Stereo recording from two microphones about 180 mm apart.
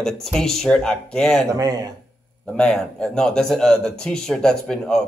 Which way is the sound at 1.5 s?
20° right (ahead or behind).